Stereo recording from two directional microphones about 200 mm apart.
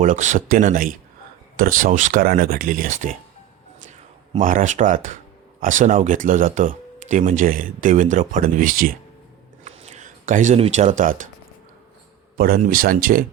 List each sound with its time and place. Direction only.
0.0 s speech: 35° right (ahead or behind)
9.6 s speech: 35° right (ahead or behind)
12.4 s speech: 45° right (ahead or behind)